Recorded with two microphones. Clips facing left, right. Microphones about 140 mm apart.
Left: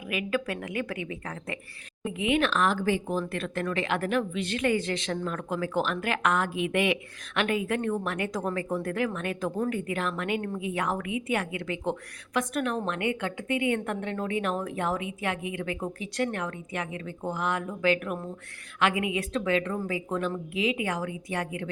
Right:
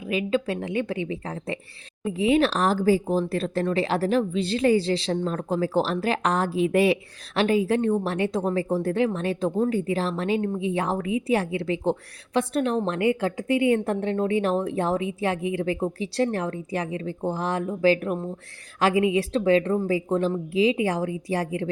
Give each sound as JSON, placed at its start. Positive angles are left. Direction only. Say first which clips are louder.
{"t": 0.1, "sound": "a woman's voice", "louder": "right 5 dB", "side_deg": -25}